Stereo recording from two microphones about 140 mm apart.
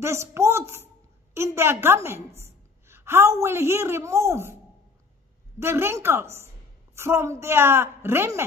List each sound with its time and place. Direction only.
0.0 s a woman's voice: 20° right (ahead or behind)
5.6 s a woman's voice: 20° right (ahead or behind)